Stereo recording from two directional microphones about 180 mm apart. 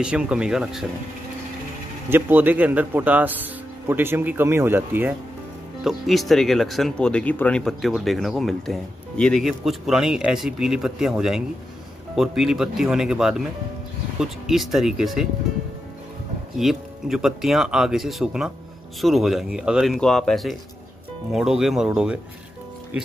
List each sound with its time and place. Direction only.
0.0 s speech: 5° right (ahead or behind)
2.0 s speech: 10° right (ahead or behind)
5.9 s speech: centre (ahead or behind)
16.5 s speech: centre (ahead or behind)